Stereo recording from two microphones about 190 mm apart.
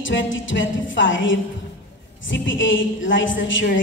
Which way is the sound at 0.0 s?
80° left.